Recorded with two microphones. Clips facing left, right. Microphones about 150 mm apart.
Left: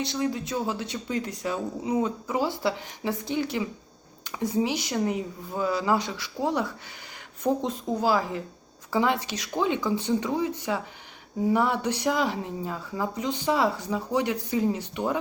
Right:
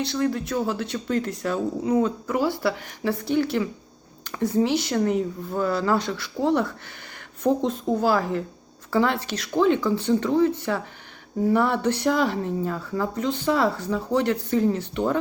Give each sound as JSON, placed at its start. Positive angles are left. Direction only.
{"t": 0.0, "sound": "speech", "side_deg": 15}
{"t": 8.2, "sound": "speech", "side_deg": -55}
{"t": 8.9, "sound": "speech", "side_deg": 15}